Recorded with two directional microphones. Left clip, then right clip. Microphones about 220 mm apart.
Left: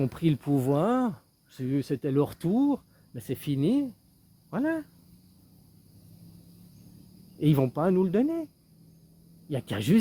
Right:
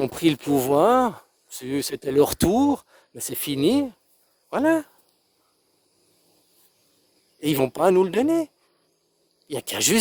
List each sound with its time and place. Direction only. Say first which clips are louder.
0.0 s speech: right 7 dB; 50° right (ahead or behind)
7.4 s speech: right 6 dB; 50° right (ahead or behind)
9.5 s speech: right 5 dB; 45° right (ahead or behind)